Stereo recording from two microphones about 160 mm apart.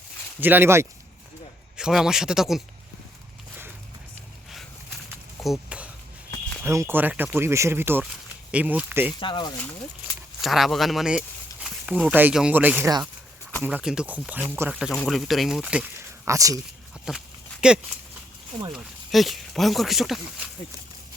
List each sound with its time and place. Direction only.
0.3 s speech: 10° right (ahead or behind)
1.7 s speech: 5° right (ahead or behind)
5.4 s a sound: 5° right (ahead or behind)
6.6 s speech: 15° right (ahead or behind)
9.2 s speech: 30° left (ahead or behind)
10.4 s speech: centre (ahead or behind)
16.2 s speech: 20° right (ahead or behind)
17.1 s a sound: 5° right (ahead or behind)
18.7 s speech: centre (ahead or behind)